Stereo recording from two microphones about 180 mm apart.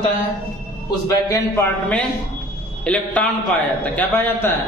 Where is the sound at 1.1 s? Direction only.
15° left (ahead or behind).